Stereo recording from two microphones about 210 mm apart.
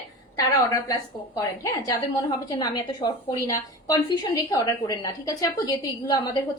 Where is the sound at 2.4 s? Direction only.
20° left (ahead or behind).